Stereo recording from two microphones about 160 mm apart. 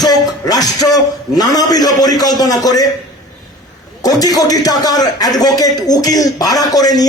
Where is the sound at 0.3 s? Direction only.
25° left (ahead or behind).